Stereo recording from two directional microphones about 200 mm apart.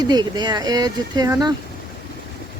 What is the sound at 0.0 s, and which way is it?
Speech, 20° right (ahead or behind).